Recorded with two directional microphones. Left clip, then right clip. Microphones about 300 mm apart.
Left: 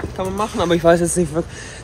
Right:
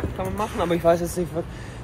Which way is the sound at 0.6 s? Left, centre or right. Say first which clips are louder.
Left 6 dB; left.